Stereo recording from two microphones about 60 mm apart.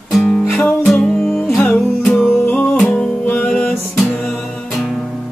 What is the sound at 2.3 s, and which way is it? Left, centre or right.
Music, left.